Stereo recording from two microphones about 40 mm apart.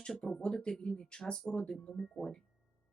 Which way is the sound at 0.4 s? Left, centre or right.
Left.